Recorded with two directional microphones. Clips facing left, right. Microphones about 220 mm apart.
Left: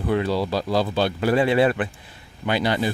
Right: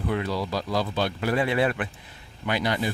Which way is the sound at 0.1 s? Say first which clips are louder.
Left 7 dB; 30° left (ahead or behind).